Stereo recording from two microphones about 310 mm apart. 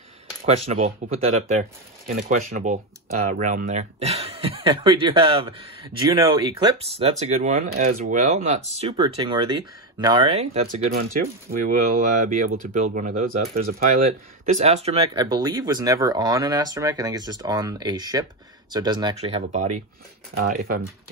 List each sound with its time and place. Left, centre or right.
0.8 s speech: right